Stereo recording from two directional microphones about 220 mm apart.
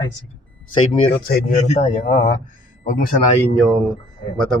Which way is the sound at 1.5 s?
30° left (ahead or behind).